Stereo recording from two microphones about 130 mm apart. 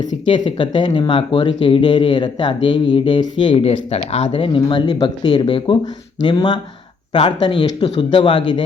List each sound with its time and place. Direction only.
0.3 s speech: 35° left (ahead or behind)